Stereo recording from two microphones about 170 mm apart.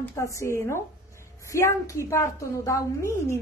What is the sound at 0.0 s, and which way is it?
A woman's voice, 15° left (ahead or behind).